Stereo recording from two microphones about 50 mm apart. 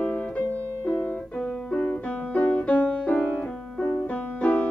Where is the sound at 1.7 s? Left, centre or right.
Left.